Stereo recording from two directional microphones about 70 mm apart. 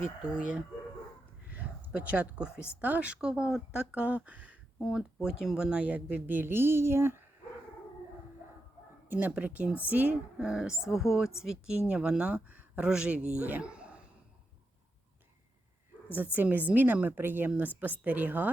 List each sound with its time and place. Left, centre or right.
0.3 s speech: centre
1.5 s a sound: right
2.8 s speech: right
3.2 s speech: centre
4.9 s speech: centre; by 7.2 s right
9.1 s speech: centre
10.4 s a man's voice: centre
16.0 s speech: right